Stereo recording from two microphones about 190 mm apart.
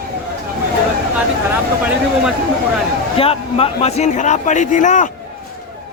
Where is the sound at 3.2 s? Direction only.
30° left (ahead or behind).